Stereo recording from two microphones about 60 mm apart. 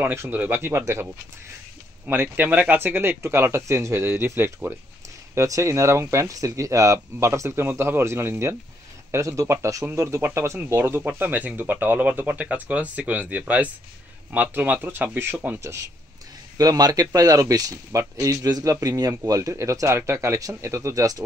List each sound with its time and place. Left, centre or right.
0.0 s speech: right
0.3 s speech: right
0.6 s speech: right
2.0 s speech: right
5.3 s speech: right
9.1 s speech: right
10.8 s speech: right
15.6 s speech: right
16.5 s speech: right
19.5 s speech: right